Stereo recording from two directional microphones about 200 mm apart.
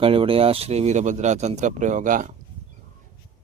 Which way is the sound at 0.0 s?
25° right (ahead or behind).